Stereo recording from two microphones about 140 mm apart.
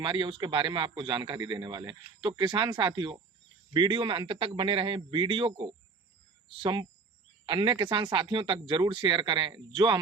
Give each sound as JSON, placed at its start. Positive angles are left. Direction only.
{"t": 0.0, "sound": "a man's voice", "side_deg": -35}